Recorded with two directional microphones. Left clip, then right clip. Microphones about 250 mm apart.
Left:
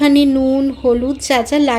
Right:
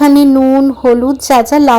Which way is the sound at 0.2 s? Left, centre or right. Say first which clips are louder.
Right 6 dB; right.